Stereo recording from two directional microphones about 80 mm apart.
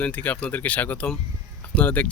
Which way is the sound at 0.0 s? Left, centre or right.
Centre.